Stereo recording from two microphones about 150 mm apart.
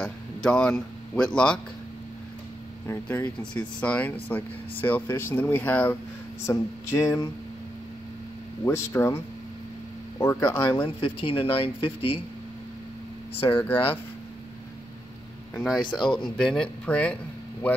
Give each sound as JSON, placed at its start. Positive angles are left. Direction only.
{"t": 0.0, "sound": "a man's voice", "side_deg": 5}
{"t": 2.9, "sound": "speech", "side_deg": 10}
{"t": 6.4, "sound": "a sound", "side_deg": 20}
{"t": 8.6, "sound": "a sound", "side_deg": 20}
{"t": 11.0, "sound": "speech", "side_deg": 35}
{"t": 13.4, "sound": "speech", "side_deg": 15}
{"t": 15.5, "sound": "speech", "side_deg": 5}